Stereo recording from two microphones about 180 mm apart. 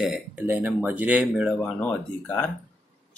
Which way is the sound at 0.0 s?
5° right (ahead or behind).